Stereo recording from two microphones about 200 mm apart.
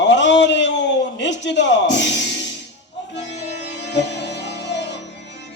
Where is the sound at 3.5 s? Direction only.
60° left (ahead or behind).